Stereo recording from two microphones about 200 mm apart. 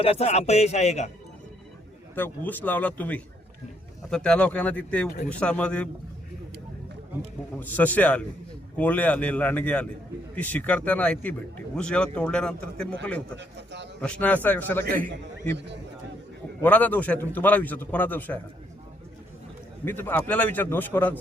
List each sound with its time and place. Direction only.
0.0 s speech: 30° left (ahead or behind)
2.1 s a man's voice: 10° left (ahead or behind)
7.6 s a man's voice: 10° left (ahead or behind)
13.3 s speech: 60° right (ahead or behind)
14.0 s a man's voice: 5° left (ahead or behind)
15.5 s speech: 60° right (ahead or behind)
16.6 s a man's voice: 10° left (ahead or behind)
19.8 s a man's voice: 10° left (ahead or behind)